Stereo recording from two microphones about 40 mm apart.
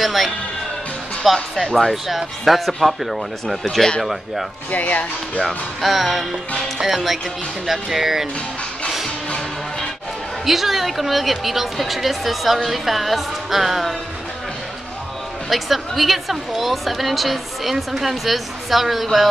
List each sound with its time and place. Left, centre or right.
0.0 s a man's voice: centre
4.6 s speech: left
5.8 s a woman's voice: centre
10.4 s a woman's voice: centre
15.5 s a woman's voice: centre